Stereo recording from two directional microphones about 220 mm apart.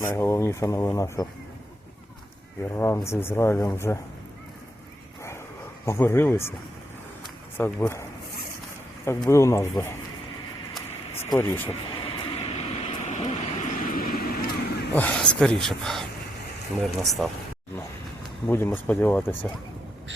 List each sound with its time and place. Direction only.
0.0 s speech: 10° left (ahead or behind)
2.7 s speech: 10° left (ahead or behind)
5.8 s speech: 10° left (ahead or behind)
7.6 s speech: 10° left (ahead or behind)
9.0 s speech: 10° left (ahead or behind)
11.2 s speech: 10° left (ahead or behind)
12.0 s vehicle: 25° left (ahead or behind); by 14.9 s 45° left (ahead or behind)
14.9 s a man's voice: 5° left (ahead or behind)
18.4 s speech: 10° left (ahead or behind)